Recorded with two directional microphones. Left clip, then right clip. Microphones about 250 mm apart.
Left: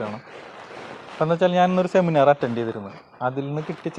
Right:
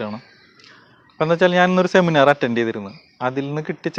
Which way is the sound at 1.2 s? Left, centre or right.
Right.